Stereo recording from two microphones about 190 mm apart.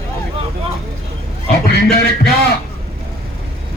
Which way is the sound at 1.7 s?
60° left (ahead or behind).